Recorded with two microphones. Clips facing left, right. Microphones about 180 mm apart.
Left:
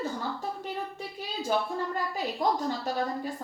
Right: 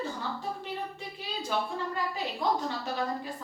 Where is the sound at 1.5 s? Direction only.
40° left (ahead or behind).